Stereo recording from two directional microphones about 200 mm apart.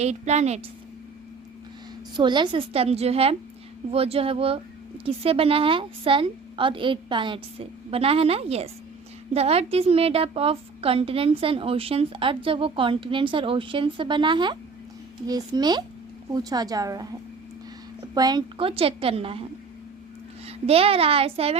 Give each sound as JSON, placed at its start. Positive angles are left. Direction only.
{"t": 0.0, "sound": "a woman's voice", "side_deg": -35}
{"t": 2.1, "sound": "a woman's voice", "side_deg": -20}
{"t": 20.5, "sound": "a woman's voice", "side_deg": -30}